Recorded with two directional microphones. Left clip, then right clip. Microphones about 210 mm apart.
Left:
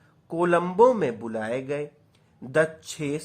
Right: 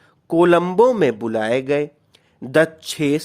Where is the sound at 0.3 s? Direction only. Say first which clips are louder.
Right 8 dB; 45° right (ahead or behind).